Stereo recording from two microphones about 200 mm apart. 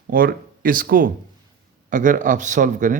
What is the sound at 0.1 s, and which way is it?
Speech, 45° right (ahead or behind).